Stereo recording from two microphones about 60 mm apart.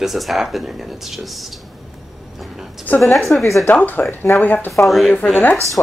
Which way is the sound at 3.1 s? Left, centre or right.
Centre.